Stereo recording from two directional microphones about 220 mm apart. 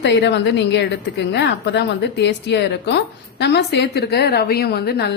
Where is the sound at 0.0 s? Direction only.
50° left (ahead or behind).